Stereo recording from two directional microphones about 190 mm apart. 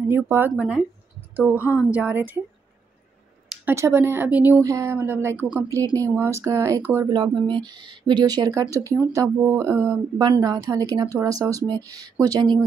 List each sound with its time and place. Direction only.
0.1 s a woman's voice: 10° right (ahead or behind)
1.6 s a woman's voice: 15° left (ahead or behind)
1.9 s speech: 10° right (ahead or behind)
3.4 s speech: 10° right (ahead or behind)
7.1 s a woman's voice: 25° right (ahead or behind)